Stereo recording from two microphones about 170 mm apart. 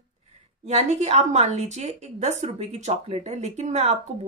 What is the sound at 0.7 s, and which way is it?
A woman's voice, 40° right (ahead or behind).